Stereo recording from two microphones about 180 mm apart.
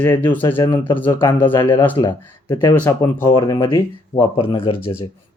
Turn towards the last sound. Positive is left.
turn(degrees=30)  # may be behind; listen again after turning